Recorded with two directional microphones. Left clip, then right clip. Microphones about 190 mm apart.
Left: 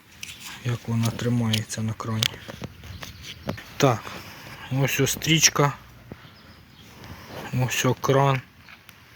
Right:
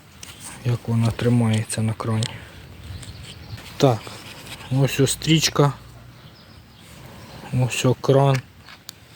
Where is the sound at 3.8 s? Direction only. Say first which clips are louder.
Right 2 dB; centre (ahead or behind).